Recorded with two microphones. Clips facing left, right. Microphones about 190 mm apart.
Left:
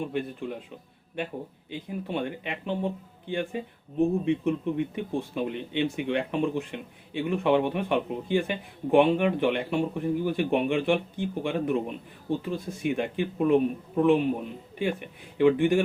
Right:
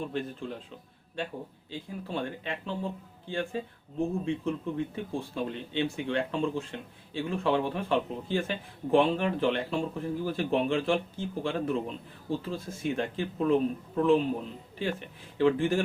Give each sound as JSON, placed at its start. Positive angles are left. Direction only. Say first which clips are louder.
{"t": 0.1, "sound": "speech", "louder": "left 3 dB", "side_deg": 15}
{"t": 1.7, "sound": "speech", "louder": "left 4 dB", "side_deg": 15}